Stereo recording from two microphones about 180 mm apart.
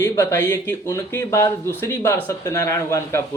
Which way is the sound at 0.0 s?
15° left (ahead or behind).